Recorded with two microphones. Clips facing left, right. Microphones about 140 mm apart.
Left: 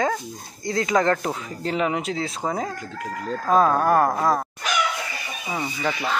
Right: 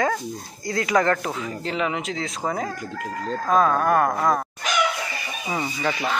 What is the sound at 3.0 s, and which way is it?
Speech, 5° left (ahead or behind).